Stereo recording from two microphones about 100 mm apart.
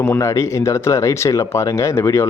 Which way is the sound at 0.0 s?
25° left (ahead or behind).